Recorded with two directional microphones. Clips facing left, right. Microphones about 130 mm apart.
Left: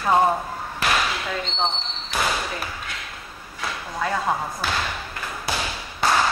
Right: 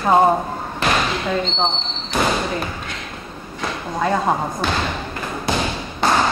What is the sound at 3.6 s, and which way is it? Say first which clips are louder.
Speech: right 5 dB; 30° right (ahead or behind).